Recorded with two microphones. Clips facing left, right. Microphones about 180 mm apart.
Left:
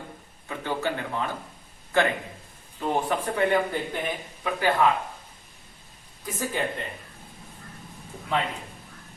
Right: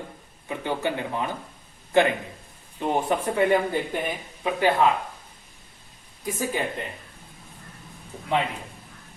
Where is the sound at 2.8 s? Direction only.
20° right (ahead or behind).